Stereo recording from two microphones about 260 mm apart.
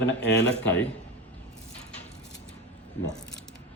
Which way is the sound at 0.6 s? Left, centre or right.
Centre.